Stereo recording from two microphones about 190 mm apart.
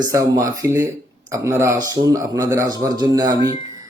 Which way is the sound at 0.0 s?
15° right (ahead or behind).